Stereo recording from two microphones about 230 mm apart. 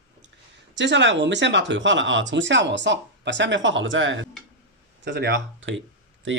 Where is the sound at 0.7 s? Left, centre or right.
Right.